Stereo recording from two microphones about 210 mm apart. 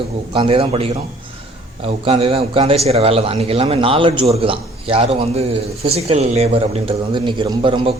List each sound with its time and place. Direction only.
0.3 s a man's voice: 25° right (ahead or behind)